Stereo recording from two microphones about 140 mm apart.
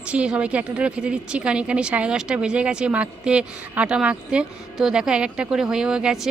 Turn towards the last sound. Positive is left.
turn(degrees=-5)  # may be behind; listen again after turning